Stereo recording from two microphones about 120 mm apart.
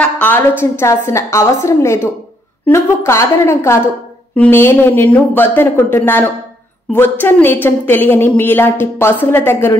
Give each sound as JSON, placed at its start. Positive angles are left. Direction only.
{"t": 0.0, "sound": "a woman's voice", "side_deg": 15}